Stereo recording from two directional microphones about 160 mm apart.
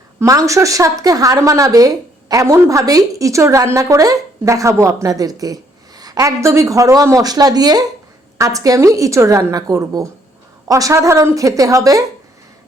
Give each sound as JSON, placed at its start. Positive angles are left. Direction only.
{"t": 0.2, "sound": "speech", "side_deg": -20}